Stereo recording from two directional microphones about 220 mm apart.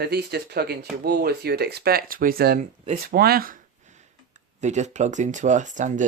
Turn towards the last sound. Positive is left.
turn(degrees=-35)  # may be behind; listen again after turning